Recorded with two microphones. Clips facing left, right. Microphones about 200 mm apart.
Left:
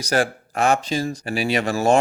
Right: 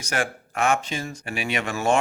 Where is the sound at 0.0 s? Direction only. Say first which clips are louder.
Left 6 dB; 35° left (ahead or behind).